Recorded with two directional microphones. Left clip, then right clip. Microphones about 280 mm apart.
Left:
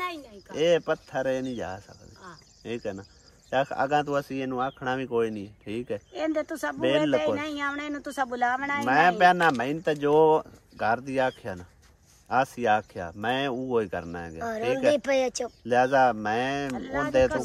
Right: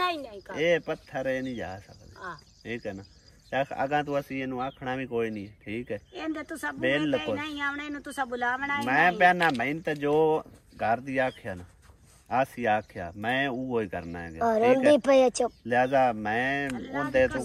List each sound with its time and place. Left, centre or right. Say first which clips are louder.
0.6 s speech: left 3 dB; centre
6.8 s speech: left 3 dB; centre
7.2 s speech: left 4 dB; left
8.8 s speech: left 2 dB; centre
14.4 s a woman's voice: right 4 dB; centre
15.6 s speech: left 3 dB; centre
16.7 s speech: left 3 dB; left
17.1 s speech: left 2 dB; centre